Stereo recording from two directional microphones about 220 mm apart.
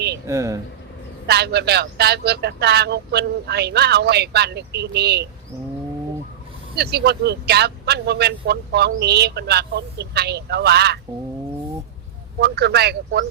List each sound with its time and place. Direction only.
0.3 s speech: 15° right (ahead or behind)
1.3 s speech: 50° right (ahead or behind)
6.7 s speech: 50° right (ahead or behind)
12.4 s speech: 45° right (ahead or behind)